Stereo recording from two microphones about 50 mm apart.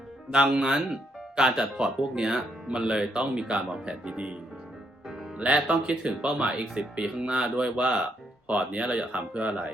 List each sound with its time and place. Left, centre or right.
0.3 s speech: centre
5.4 s speech: right